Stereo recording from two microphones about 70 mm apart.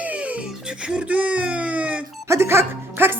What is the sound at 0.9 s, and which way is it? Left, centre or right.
A woman's voice, centre.